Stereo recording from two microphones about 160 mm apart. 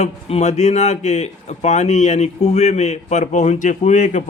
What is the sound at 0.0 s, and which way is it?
Speech, 45° left (ahead or behind).